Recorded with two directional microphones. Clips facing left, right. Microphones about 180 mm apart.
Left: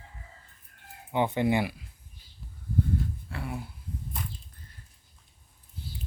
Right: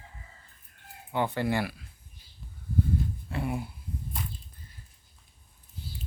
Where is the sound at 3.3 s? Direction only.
20° right (ahead or behind).